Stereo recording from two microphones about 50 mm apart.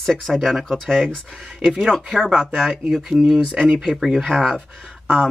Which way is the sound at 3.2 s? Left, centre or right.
Centre.